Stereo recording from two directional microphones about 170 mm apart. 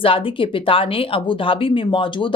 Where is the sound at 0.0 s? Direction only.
30° left (ahead or behind).